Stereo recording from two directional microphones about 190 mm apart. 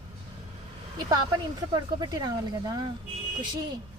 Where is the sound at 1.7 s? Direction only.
20° right (ahead or behind).